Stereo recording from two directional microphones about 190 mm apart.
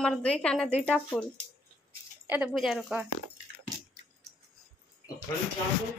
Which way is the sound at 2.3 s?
10° right (ahead or behind).